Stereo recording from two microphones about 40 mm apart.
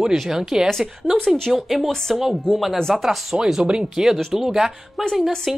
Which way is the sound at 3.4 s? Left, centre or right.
Centre.